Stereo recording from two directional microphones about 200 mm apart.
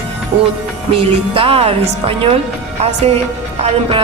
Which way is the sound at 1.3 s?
30° right (ahead or behind).